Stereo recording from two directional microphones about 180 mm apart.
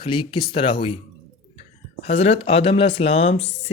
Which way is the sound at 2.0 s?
35° left (ahead or behind).